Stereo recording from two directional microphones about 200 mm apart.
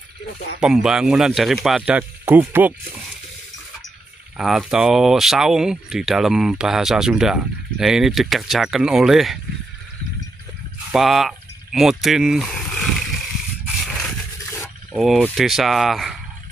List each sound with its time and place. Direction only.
0.6 s speech: 5° right (ahead or behind)
4.4 s speech: centre (ahead or behind)
10.9 s a sound: centre (ahead or behind)
15.0 s speech: centre (ahead or behind)